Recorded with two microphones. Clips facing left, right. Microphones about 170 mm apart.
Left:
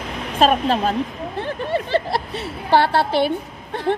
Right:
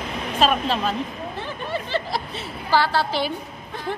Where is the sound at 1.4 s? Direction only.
60° left (ahead or behind).